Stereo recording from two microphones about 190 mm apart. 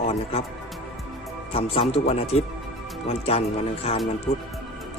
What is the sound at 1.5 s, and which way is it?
Speech, 30° left (ahead or behind).